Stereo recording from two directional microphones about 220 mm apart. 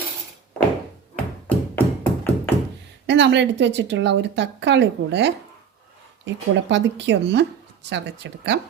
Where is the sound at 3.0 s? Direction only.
50° right (ahead or behind).